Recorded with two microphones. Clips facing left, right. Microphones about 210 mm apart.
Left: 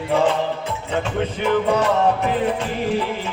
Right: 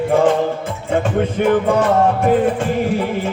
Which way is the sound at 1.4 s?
50° right (ahead or behind).